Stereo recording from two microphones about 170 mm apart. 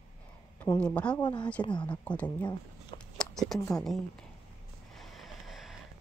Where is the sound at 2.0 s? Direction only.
10° left (ahead or behind).